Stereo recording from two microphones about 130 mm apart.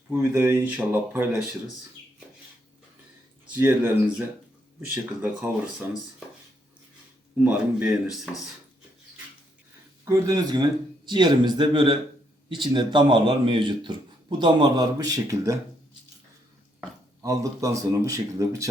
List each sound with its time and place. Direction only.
0.1 s speech: 15° right (ahead or behind)
3.5 s speech: 15° right (ahead or behind)
5.2 s speech: 15° right (ahead or behind)
7.3 s speech: 10° right (ahead or behind)
10.1 s speech: 25° right (ahead or behind)
17.2 s speech: 25° right (ahead or behind)